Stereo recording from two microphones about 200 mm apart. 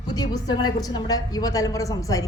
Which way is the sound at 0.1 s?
20° left (ahead or behind).